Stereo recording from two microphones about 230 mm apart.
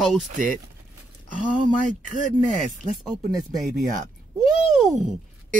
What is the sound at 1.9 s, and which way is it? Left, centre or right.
Speech, right.